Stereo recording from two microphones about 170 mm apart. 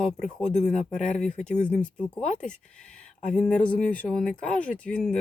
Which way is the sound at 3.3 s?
5° left (ahead or behind).